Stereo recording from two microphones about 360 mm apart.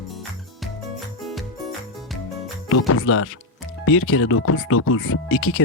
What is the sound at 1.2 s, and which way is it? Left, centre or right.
Music, centre.